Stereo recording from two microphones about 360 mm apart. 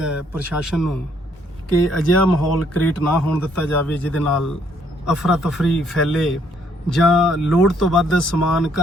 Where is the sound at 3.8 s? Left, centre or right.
Centre.